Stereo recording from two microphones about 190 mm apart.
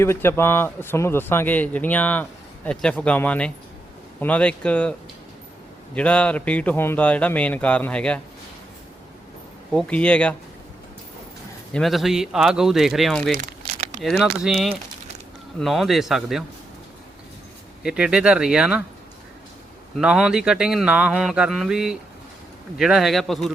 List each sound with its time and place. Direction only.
0.0 s a man's voice: 15° left (ahead or behind)
9.7 s a man's voice: 5° left (ahead or behind)
11.7 s speech: centre (ahead or behind)
13.3 s crumpling: 45° right (ahead or behind)
14.0 s speech: centre (ahead or behind)
17.8 s speech: 5° right (ahead or behind)
20.0 s speech: 5° right (ahead or behind)